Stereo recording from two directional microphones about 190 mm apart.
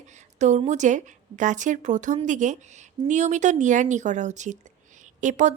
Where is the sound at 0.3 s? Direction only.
40° right (ahead or behind).